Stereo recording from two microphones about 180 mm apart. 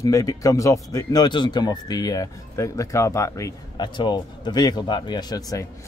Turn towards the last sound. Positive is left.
turn(degrees=20)  # may be behind; listen again after turning